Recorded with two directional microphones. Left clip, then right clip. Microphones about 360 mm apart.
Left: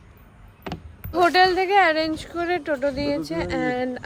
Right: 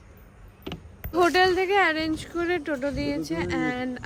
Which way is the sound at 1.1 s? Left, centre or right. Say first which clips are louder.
Left 3 dB; centre.